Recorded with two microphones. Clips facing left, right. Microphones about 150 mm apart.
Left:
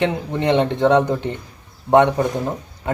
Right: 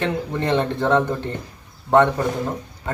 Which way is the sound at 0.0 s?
20° left (ahead or behind).